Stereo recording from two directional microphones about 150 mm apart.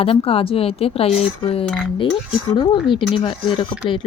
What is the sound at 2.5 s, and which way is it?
A woman's voice, 30° left (ahead or behind).